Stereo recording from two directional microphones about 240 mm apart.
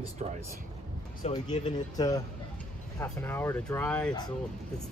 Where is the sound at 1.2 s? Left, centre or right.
Left.